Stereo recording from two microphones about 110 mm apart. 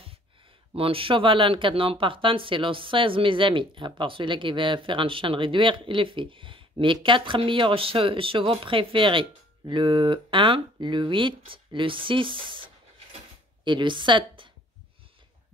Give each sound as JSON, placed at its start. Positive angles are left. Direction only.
{"t": 0.7, "sound": "speech", "side_deg": -55}